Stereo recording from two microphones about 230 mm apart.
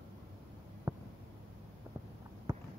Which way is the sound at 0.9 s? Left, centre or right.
Centre.